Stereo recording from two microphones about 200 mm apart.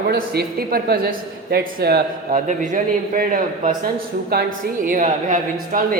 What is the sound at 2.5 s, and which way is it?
A man's voice, 40° right (ahead or behind).